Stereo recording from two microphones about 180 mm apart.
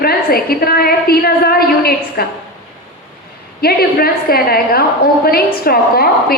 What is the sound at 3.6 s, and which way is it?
A woman's voice, 60° left (ahead or behind).